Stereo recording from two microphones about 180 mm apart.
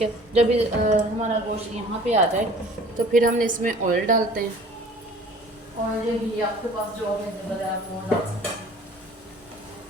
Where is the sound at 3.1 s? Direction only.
50° right (ahead or behind).